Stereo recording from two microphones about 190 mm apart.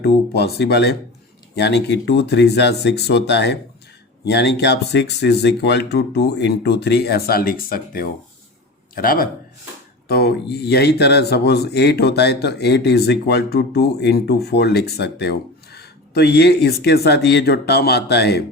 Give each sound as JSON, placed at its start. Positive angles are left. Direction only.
{"t": 0.0, "sound": "speech", "side_deg": 60}